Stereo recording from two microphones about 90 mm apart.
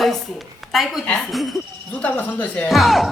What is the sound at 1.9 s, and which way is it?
Speech, 15° left (ahead or behind).